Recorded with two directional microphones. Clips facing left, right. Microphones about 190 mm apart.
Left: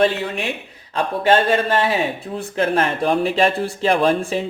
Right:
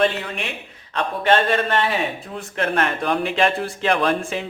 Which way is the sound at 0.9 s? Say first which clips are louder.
Left 2 dB; 30° left (ahead or behind).